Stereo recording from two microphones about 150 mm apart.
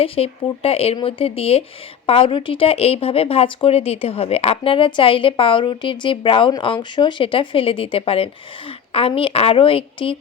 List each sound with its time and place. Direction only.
0.0 s speech: 40° left (ahead or behind)